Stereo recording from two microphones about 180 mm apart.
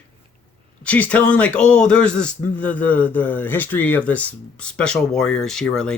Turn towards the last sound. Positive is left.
turn(degrees=5)  # may be behind; listen again after turning